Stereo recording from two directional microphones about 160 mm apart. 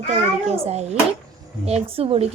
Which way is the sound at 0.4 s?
40° right (ahead or behind).